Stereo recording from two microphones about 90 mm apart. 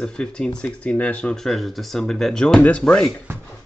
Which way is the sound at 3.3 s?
25° right (ahead or behind).